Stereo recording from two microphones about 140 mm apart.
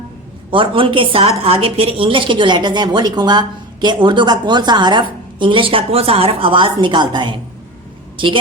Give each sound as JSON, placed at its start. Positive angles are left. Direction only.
{"t": 0.5, "sound": "a woman's voice", "side_deg": -40}